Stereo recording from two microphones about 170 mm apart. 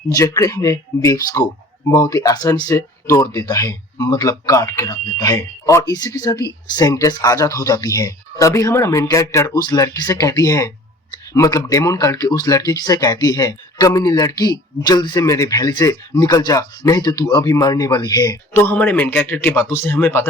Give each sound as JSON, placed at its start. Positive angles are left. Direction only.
{"t": 0.1, "sound": "speech", "side_deg": 20}
{"t": 18.6, "sound": "a man's voice", "side_deg": 10}